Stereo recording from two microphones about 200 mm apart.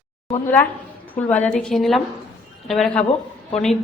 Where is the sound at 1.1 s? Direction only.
10° left (ahead or behind).